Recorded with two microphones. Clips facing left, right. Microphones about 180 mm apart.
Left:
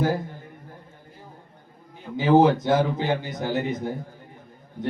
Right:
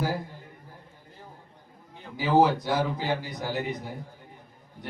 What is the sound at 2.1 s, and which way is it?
A man's voice, 20° left (ahead or behind).